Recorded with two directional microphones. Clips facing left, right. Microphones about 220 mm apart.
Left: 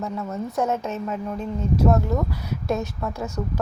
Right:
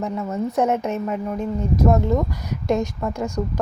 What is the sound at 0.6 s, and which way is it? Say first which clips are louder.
Speech: right 3 dB; 15° right (ahead or behind).